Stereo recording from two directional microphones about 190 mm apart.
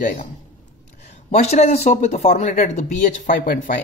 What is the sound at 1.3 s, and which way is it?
Speech, 35° left (ahead or behind).